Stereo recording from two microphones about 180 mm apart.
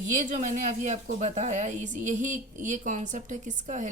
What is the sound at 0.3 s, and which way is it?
A woman's voice, 40° right (ahead or behind).